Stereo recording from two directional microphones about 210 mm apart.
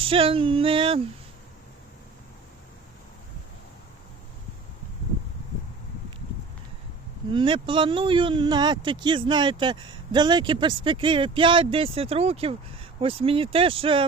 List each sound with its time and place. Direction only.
0.0 s speech: 25° right (ahead or behind)
7.3 s speech: 25° right (ahead or behind)